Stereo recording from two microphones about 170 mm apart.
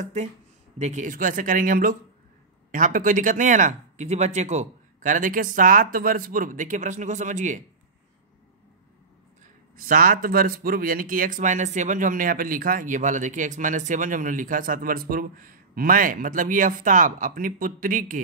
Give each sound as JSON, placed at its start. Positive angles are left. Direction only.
{"t": 0.0, "sound": "speech", "side_deg": -45}
{"t": 9.8, "sound": "speech", "side_deg": -60}